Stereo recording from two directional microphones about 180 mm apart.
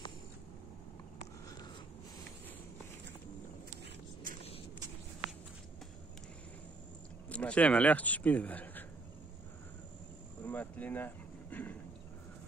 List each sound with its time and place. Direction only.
3.7 s vehicle: 50° right (ahead or behind)
7.2 s speech: 5° left (ahead or behind)
10.4 s a sound: 10° left (ahead or behind)